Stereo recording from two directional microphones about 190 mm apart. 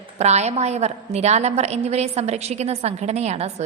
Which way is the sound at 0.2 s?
35° right (ahead or behind).